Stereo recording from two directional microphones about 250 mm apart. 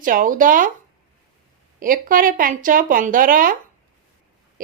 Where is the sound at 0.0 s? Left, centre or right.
Right.